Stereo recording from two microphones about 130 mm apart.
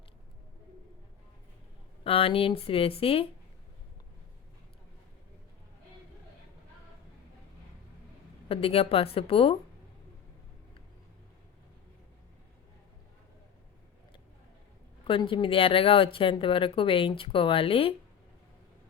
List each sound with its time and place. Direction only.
2.0 s speech: 45° left (ahead or behind)
8.4 s speech: 45° left (ahead or behind)
15.0 s speech: 40° left (ahead or behind)